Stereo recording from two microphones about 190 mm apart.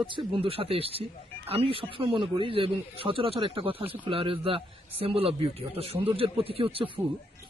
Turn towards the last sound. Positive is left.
turn(degrees=-30)  # may be behind; listen again after turning